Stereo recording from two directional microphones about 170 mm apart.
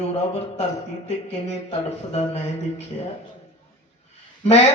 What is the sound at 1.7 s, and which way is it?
Speech, 35° left (ahead or behind).